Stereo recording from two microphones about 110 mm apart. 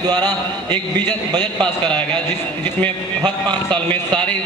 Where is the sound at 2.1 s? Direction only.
40° right (ahead or behind).